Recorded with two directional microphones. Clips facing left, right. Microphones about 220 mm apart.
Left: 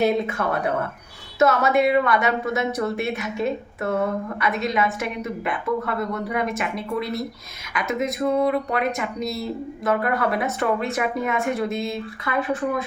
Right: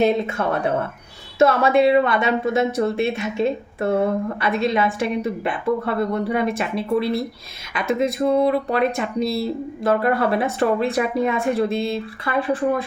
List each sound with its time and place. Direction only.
0.0 s a woman's voice: 25° right (ahead or behind)